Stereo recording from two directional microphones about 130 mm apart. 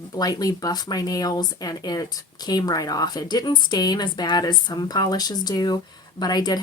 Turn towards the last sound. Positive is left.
turn(degrees=30)  # may be behind; listen again after turning